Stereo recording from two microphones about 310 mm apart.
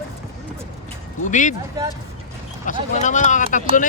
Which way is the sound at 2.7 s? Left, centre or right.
Left.